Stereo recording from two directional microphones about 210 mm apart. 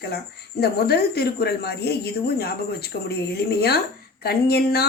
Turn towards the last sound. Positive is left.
turn(degrees=50)  # may be behind; listen again after turning